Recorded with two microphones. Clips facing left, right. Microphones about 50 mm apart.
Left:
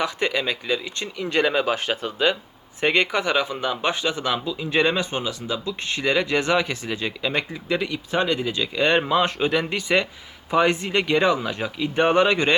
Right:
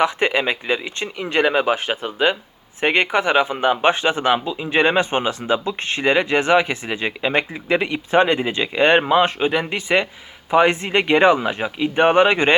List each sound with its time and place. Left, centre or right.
0.0 s speech: right